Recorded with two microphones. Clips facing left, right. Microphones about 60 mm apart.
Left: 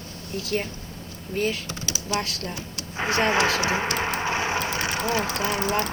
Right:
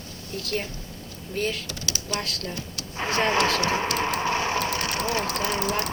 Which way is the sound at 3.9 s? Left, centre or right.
Centre.